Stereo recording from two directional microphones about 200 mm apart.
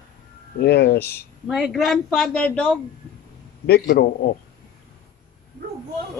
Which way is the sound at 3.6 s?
55° left (ahead or behind).